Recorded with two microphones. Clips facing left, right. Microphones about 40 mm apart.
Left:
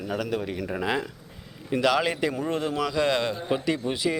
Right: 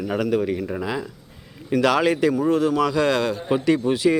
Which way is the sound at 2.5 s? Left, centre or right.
Left.